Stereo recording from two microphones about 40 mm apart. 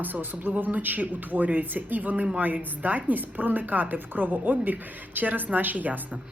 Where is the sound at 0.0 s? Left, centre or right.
Right.